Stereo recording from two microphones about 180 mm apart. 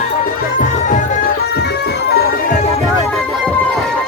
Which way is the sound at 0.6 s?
45° left (ahead or behind).